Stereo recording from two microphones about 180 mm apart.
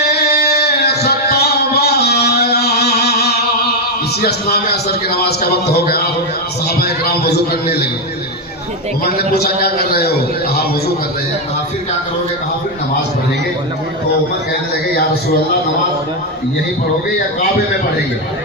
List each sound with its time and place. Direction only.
0.1 s music: 65° left (ahead or behind)
4.2 s a man's voice: 60° left (ahead or behind)
9.4 s a man's voice: 60° left (ahead or behind)